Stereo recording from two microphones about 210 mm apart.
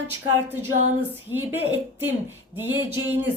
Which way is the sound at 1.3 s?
10° right (ahead or behind).